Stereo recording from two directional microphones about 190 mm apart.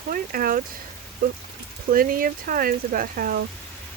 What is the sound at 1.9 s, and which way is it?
Speech, 50° right (ahead or behind).